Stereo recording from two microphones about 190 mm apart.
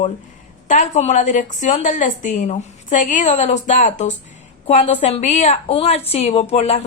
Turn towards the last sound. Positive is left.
turn(degrees=35)  # may be behind; listen again after turning